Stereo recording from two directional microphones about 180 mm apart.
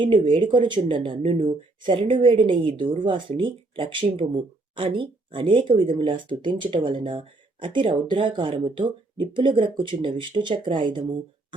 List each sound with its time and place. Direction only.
0.0 s speech: 25° right (ahead or behind)